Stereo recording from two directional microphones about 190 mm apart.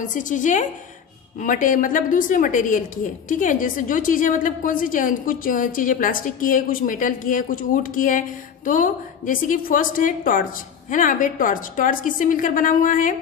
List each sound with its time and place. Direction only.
0.0 s a woman's voice: 45° left (ahead or behind)